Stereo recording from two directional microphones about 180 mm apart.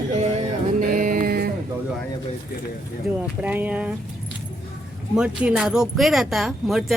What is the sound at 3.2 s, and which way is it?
Speech, 10° right (ahead or behind).